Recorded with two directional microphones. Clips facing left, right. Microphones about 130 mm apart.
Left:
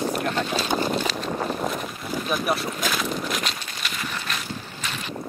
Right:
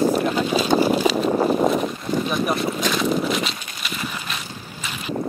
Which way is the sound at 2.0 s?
Centre (ahead or behind).